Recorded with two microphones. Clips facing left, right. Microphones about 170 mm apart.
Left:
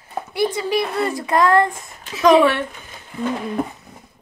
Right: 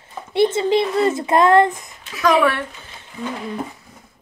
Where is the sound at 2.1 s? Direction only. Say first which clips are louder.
Left 3 dB; 25° left (ahead or behind).